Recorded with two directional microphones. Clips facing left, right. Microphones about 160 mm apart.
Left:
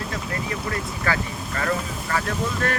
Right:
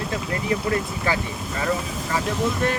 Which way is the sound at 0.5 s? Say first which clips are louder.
Right 6 dB; 25° right (ahead or behind).